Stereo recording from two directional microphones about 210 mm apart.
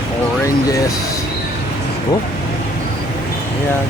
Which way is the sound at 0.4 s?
15° left (ahead or behind).